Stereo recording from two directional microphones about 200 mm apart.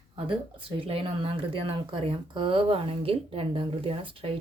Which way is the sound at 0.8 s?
30° right (ahead or behind).